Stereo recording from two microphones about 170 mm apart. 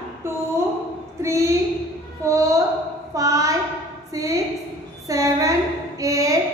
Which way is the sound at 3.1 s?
20° right (ahead or behind).